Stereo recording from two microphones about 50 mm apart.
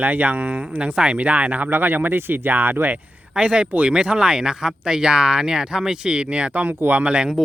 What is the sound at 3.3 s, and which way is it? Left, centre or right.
Speech, right.